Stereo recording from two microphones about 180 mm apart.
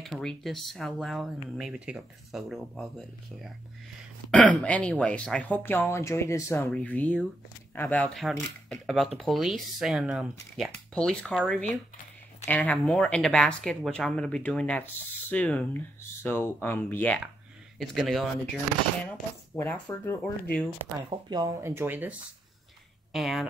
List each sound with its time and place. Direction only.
0.0 s speech: centre (ahead or behind)
17.7 s speech: centre (ahead or behind)
19.5 s speech: 15° left (ahead or behind)
21.1 s speech: 25° right (ahead or behind)
23.1 s speech: centre (ahead or behind)